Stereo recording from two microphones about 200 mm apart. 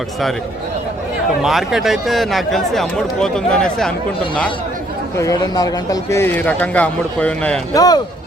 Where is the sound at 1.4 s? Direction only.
Centre (ahead or behind).